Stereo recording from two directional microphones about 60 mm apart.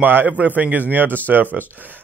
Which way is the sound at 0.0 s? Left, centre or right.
Right.